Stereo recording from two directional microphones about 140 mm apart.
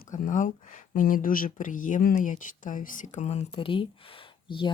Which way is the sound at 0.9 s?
75° left (ahead or behind).